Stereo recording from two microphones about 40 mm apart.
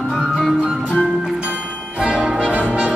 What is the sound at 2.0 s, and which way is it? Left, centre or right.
Brass instrument, right.